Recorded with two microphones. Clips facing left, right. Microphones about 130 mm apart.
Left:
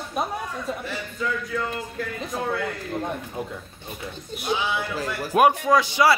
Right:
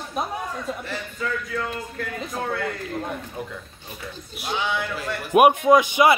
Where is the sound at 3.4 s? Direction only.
25° left (ahead or behind).